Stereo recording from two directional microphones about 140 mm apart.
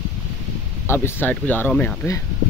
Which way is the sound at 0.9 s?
15° left (ahead or behind).